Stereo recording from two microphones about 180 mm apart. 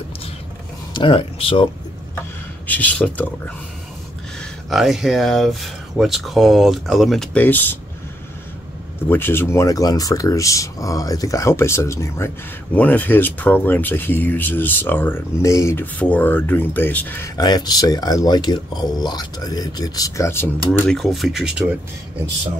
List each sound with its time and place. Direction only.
0.9 s speech: 30° left (ahead or behind)
2.6 s speech: 10° left (ahead or behind)
9.1 s speech: 10° left (ahead or behind)
17.4 s speech: 20° left (ahead or behind)
20.8 s speech: centre (ahead or behind)